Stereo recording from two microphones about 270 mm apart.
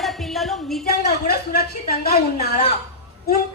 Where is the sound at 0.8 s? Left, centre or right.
Left.